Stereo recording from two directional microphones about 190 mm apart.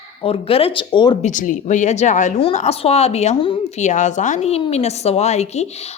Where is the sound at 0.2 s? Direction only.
30° left (ahead or behind).